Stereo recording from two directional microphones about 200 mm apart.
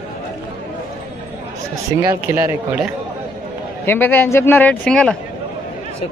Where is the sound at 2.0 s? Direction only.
15° right (ahead or behind).